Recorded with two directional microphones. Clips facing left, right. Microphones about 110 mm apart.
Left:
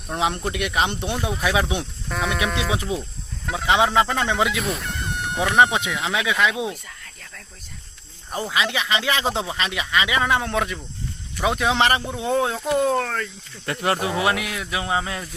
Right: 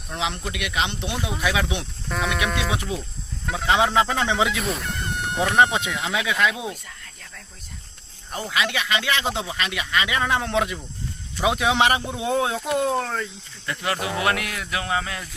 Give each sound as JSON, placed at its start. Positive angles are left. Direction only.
{"t": 0.1, "sound": "speech", "side_deg": 45}
{"t": 2.0, "sound": "speech", "side_deg": 0}
{"t": 3.4, "sound": "speech", "side_deg": 5}
{"t": 6.4, "sound": "speech", "side_deg": 15}
{"t": 6.8, "sound": "snake", "side_deg": 0}
{"t": 8.3, "sound": "speech", "side_deg": 25}
{"t": 9.8, "sound": "speech", "side_deg": 10}
{"t": 13.8, "sound": "speech", "side_deg": 35}
{"t": 14.1, "sound": "speech", "side_deg": 15}